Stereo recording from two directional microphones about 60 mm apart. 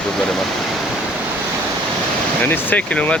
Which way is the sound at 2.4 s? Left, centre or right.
Left.